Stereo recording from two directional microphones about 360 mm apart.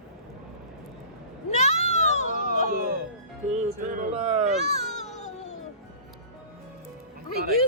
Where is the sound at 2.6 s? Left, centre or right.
Right.